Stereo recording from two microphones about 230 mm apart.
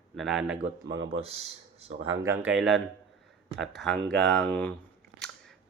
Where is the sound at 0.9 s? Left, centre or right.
Right.